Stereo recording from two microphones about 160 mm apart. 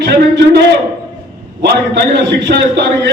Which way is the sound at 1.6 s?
90° right.